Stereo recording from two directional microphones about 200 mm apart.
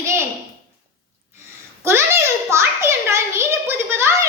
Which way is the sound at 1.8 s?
15° right (ahead or behind).